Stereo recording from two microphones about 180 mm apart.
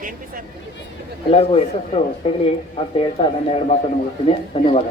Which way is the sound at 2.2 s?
35° left (ahead or behind).